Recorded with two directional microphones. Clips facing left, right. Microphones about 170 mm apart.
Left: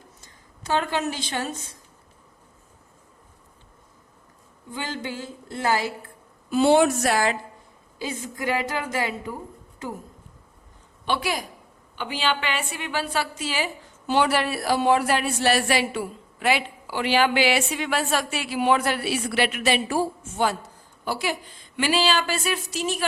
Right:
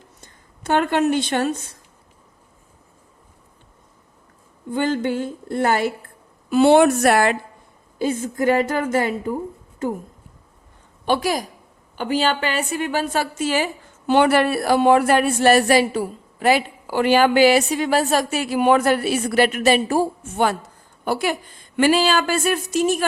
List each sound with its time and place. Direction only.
0.2 s a woman's voice: 60° right (ahead or behind)
4.7 s a woman's voice: 55° right (ahead or behind)
7.9 s speech: 50° right (ahead or behind)
11.0 s a woman's voice: 45° right (ahead or behind)
20.2 s a woman's voice: 60° right (ahead or behind)